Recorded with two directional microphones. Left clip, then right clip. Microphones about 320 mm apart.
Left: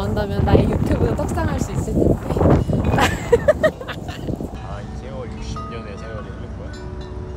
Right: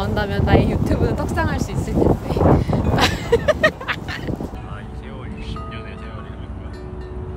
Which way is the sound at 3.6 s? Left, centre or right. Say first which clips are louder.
Right 1 dB; centre.